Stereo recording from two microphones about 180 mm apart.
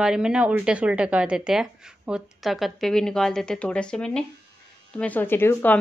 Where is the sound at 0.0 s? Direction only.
5° right (ahead or behind).